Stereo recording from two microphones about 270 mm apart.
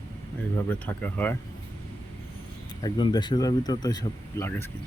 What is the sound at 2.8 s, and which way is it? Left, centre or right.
Speech, centre.